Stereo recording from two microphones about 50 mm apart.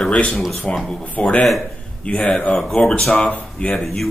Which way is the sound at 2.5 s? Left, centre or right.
Centre.